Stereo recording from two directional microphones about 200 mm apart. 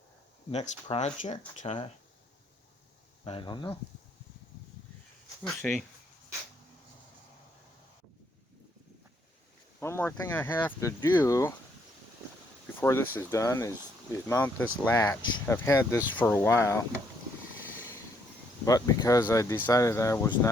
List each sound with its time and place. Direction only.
0.5 s speech: 35° left (ahead or behind)
3.2 s speech: 25° left (ahead or behind)
5.4 s speech: 5° left (ahead or behind)
9.8 s speech: 10° left (ahead or behind)
12.8 s speech: 10° left (ahead or behind)
18.6 s speech: 15° left (ahead or behind)